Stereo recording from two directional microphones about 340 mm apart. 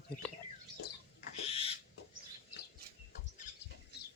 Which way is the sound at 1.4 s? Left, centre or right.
Centre.